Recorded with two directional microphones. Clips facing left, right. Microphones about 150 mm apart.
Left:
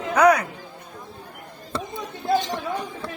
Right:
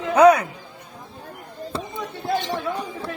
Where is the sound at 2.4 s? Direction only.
60° right (ahead or behind).